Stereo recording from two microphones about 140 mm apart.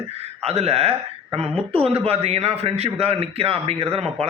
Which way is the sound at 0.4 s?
50° right (ahead or behind).